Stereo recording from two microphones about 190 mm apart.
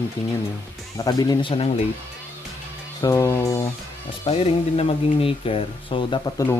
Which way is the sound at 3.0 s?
15° left (ahead or behind).